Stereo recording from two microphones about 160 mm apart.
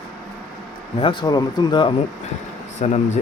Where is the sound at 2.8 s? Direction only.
45° left (ahead or behind).